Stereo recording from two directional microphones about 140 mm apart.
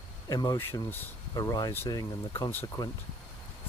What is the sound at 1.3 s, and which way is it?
Speech, 25° left (ahead or behind).